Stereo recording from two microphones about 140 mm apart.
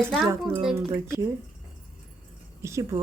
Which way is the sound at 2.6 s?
20° right (ahead or behind).